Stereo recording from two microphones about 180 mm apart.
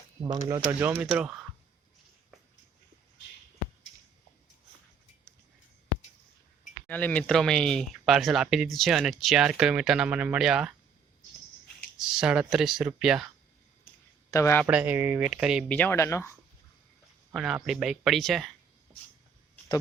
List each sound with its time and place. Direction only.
0.4 s speech: 20° right (ahead or behind)
6.8 s speech: 10° left (ahead or behind)
12.0 s speech: 5° right (ahead or behind)
14.3 s speech: 15° left (ahead or behind)
14.7 s speech: 10° right (ahead or behind)
15.7 s speech: 10° left (ahead or behind)
17.3 s speech: centre (ahead or behind)